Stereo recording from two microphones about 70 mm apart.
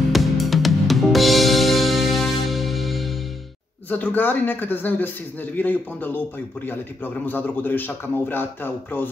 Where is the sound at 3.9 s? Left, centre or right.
Left.